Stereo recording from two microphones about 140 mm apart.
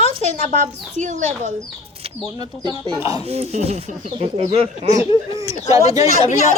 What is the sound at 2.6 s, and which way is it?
Speech, 30° right (ahead or behind).